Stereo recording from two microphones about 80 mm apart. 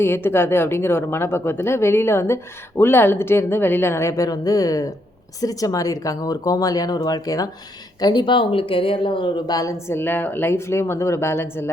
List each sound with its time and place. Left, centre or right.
0.0 s speech: left
4.3 s speech: left
8.0 s speech: left
9.5 s speech: left
9.9 s speech: left